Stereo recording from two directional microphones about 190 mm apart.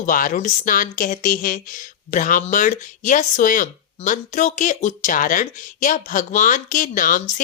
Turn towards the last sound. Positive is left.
turn(degrees=40)  # may be behind; listen again after turning